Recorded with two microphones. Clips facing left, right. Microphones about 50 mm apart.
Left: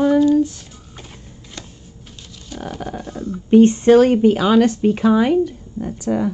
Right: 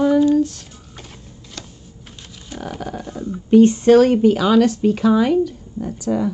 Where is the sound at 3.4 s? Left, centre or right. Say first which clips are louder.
Even; left.